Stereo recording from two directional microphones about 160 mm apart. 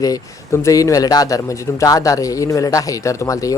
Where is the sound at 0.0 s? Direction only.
20° left (ahead or behind).